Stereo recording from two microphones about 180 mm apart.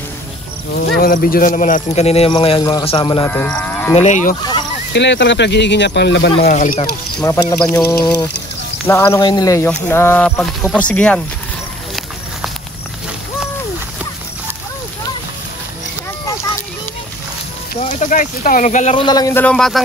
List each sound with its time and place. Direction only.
0.9 s speech: 55° left (ahead or behind); by 3.3 s 25° left (ahead or behind)
3.3 s cattle: 10° left (ahead or behind)
3.9 s moo: 40° left (ahead or behind)
4.4 s speech: 25° left (ahead or behind)
4.9 s speech: 75° left (ahead or behind)
6.5 s moo: 45° left (ahead or behind)
7.2 s speech: 15° left (ahead or behind)
8.8 s speech: 15° left (ahead or behind)
17.7 s speech: 40° left (ahead or behind)
18.9 s speech: 20° left (ahead or behind)
19.4 s a man's voice: 5° left (ahead or behind)